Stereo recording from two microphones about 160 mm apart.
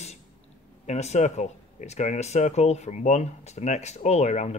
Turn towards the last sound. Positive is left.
turn(degrees=45)  # may be behind; listen again after turning